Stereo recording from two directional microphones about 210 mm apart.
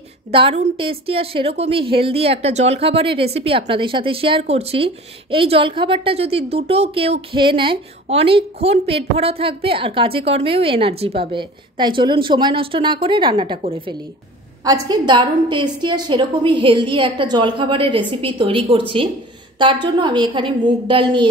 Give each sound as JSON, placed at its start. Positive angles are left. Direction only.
{"t": 0.3, "sound": "a woman's voice", "side_deg": -25}